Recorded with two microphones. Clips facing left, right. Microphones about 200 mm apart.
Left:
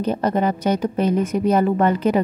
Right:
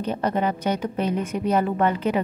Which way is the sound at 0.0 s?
40° left (ahead or behind).